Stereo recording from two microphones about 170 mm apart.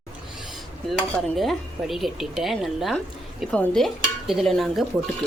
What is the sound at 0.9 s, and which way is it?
Speech, centre (ahead or behind).